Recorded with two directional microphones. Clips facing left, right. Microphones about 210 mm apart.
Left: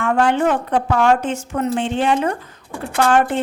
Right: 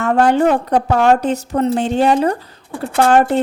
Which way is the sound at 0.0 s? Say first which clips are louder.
Right 3 dB; 40° right (ahead or behind).